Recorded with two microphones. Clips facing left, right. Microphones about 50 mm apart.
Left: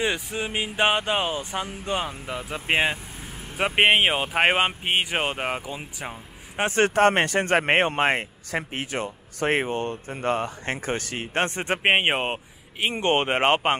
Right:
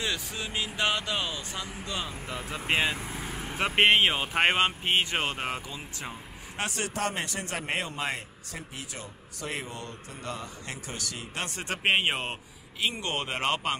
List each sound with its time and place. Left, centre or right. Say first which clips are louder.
0.0 s speech: left 6 dB; left
2.3 s speech: left 3 dB; centre
2.7 s speech: left 4 dB; left
3.5 s speech: left 3 dB; centre
6.7 s speech: left 15 dB; left
11.4 s speech: left 4 dB; left